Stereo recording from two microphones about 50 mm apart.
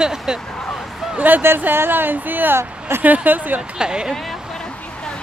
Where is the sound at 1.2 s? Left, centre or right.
Right.